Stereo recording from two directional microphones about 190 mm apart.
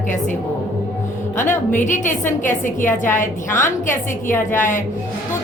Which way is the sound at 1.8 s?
40° left (ahead or behind).